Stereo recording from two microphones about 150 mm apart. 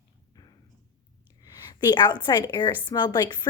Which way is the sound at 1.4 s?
25° left (ahead or behind).